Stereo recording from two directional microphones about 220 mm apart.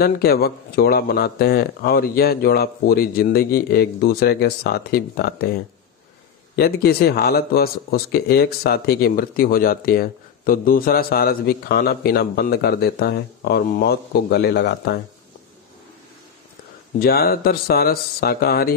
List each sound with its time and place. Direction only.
0.0 s speech: 45° left (ahead or behind)
6.5 s speech: 45° left (ahead or behind)
17.0 s speech: 45° left (ahead or behind)